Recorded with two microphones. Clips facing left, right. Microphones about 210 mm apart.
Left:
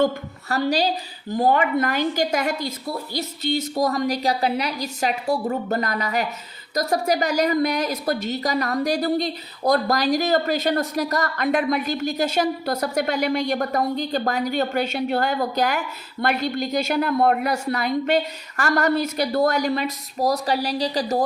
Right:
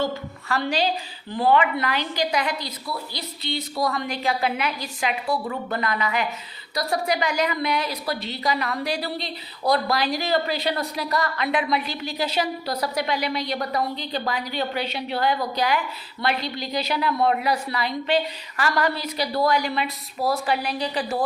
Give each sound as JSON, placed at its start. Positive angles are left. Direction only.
{"t": 0.0, "sound": "a woman's voice", "side_deg": 40}